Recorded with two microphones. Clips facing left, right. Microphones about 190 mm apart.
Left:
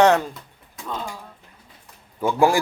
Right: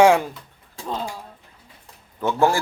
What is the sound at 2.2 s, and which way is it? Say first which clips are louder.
Speech: left 1 dB; 10° left (ahead or behind).